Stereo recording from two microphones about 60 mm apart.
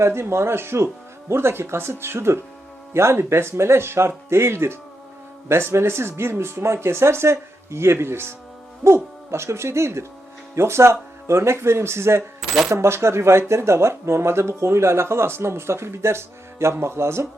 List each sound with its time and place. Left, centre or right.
0.0 s speech: right